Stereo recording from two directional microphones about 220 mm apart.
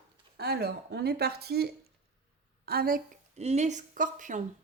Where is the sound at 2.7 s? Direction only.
45° right (ahead or behind).